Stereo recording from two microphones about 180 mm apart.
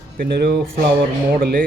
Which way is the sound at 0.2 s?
60° right (ahead or behind).